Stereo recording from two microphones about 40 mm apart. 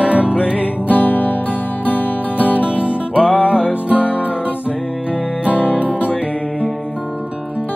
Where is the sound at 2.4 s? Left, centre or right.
Right.